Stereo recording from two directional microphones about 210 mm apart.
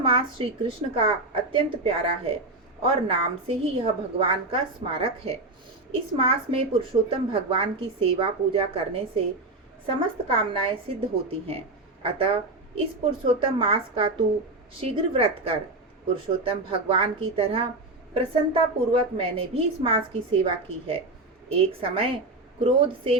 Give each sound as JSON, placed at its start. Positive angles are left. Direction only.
{"t": 0.0, "sound": "a woman's voice", "side_deg": -25}